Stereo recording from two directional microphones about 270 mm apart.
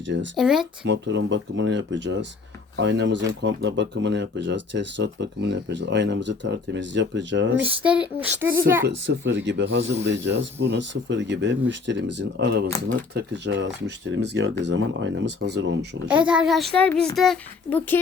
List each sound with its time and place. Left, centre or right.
0.3 s a woman's voice: centre
0.9 s speech: right
7.6 s a sound: centre
9.0 s speech: right
16.0 s a woman's voice: centre